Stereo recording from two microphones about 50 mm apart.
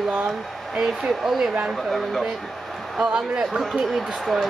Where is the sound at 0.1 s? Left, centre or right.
Centre.